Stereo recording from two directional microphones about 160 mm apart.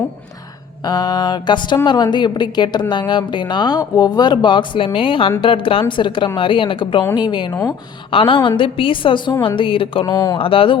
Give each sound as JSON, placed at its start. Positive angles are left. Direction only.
{"t": 0.9, "sound": "a woman's voice", "side_deg": 25}
{"t": 10.3, "sound": "a woman's voice", "side_deg": 35}